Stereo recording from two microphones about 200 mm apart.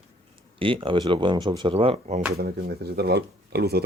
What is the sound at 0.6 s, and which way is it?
Speech, 25° right (ahead or behind).